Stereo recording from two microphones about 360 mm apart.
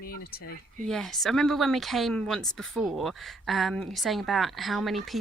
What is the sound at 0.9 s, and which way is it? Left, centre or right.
Speech, centre.